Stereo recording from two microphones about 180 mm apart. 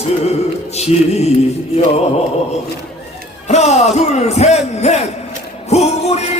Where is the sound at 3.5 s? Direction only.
40° left (ahead or behind).